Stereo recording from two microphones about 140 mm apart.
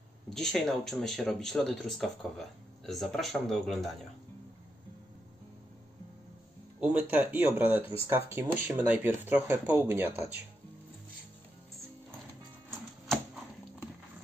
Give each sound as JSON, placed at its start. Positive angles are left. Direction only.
{"t": 0.3, "sound": "speech", "side_deg": 5}
{"t": 6.8, "sound": "speech", "side_deg": -10}